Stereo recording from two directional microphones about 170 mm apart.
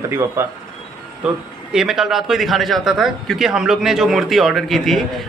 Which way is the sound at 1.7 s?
5° right (ahead or behind).